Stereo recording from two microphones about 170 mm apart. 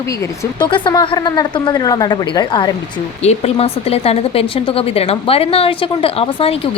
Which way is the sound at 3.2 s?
40° left (ahead or behind).